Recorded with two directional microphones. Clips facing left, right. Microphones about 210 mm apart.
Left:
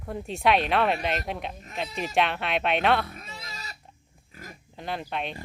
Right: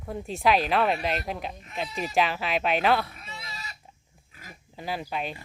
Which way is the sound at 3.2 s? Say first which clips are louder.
Even; 40° left (ahead or behind).